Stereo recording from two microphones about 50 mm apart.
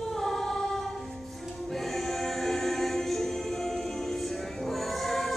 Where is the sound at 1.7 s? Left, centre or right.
Centre.